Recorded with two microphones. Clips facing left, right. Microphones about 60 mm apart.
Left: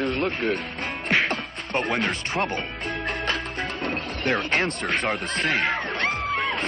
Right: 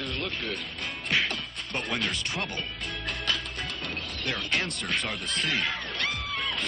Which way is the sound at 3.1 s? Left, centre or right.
Left.